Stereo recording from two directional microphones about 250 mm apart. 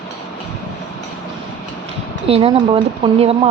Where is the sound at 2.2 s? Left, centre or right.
Right.